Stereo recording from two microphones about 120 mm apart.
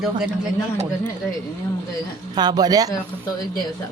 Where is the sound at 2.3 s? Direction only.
35° right (ahead or behind).